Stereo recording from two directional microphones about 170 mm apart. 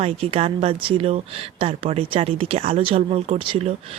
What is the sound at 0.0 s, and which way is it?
A woman's voice, 35° right (ahead or behind).